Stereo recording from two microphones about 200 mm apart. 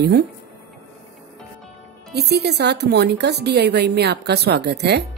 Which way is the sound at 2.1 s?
55° right (ahead or behind).